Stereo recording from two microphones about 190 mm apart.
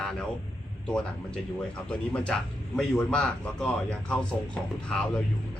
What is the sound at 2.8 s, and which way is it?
A man's voice, 5° left (ahead or behind).